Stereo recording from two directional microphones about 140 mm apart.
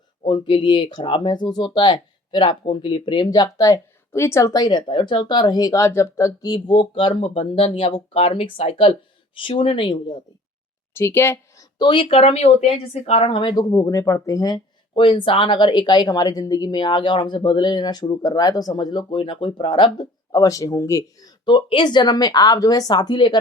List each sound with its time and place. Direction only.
0.3 s speech: 35° left (ahead or behind)
10.9 s speech: 15° left (ahead or behind); by 13.7 s 35° left (ahead or behind)
13.7 s speech: 20° left (ahead or behind)